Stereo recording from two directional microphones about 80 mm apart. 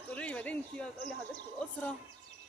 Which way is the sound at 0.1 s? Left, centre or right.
Centre.